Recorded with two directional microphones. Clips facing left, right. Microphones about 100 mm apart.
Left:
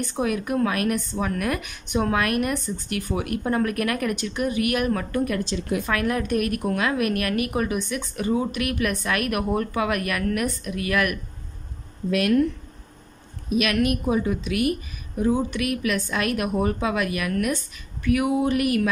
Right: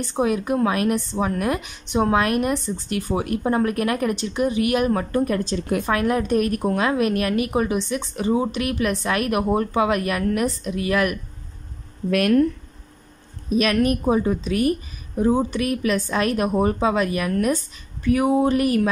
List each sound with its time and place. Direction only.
0.0 s a woman's voice: 25° right (ahead or behind); by 5.9 s 45° right (ahead or behind)
5.9 s a woman's voice: 25° right (ahead or behind)
12.1 s speech: 45° right (ahead or behind)
13.5 s a woman's voice: 35° right (ahead or behind)